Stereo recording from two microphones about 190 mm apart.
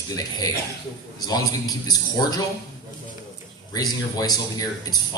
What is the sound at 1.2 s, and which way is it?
Speech, 20° left (ahead or behind).